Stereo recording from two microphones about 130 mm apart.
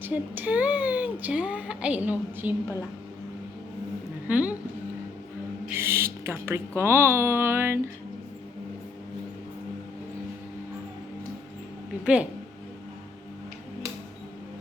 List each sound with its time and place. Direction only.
0.0 s speech: 15° right (ahead or behind)
4.3 s speech: 10° right (ahead or behind)
5.6 s speech: 20° right (ahead or behind)
12.0 s speech: 10° right (ahead or behind)